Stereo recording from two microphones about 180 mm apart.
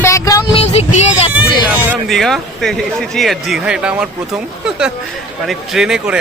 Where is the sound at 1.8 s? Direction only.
Centre (ahead or behind).